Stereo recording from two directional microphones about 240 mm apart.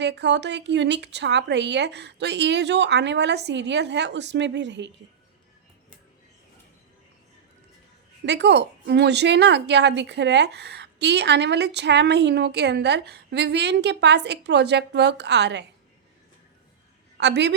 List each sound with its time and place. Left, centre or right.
0.0 s a woman's voice: right
8.2 s a woman's voice: right
17.2 s a woman's voice: right